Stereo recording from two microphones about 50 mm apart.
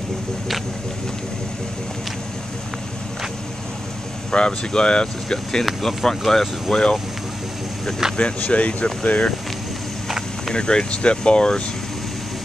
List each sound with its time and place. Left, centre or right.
4.3 s speech: centre
8.2 s speech: left
10.5 s speech: centre